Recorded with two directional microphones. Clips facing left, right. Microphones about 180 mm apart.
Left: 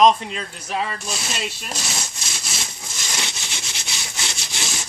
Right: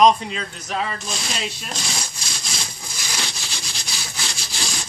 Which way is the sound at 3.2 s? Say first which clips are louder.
Even; 20° left (ahead or behind).